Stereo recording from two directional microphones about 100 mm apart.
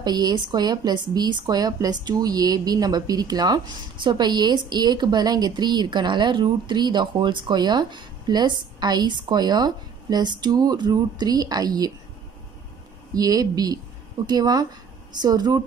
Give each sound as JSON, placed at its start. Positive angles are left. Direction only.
{"t": 0.0, "sound": "a woman's voice", "side_deg": -45}
{"t": 13.1, "sound": "a woman's voice", "side_deg": -40}